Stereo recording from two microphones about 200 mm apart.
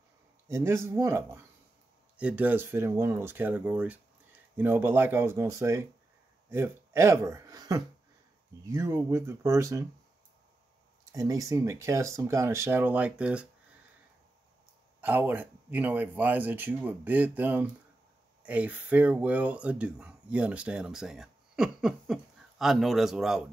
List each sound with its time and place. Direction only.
0.5 s speech: 10° right (ahead or behind)
11.1 s speech: 15° right (ahead or behind)
15.0 s speech: 10° right (ahead or behind)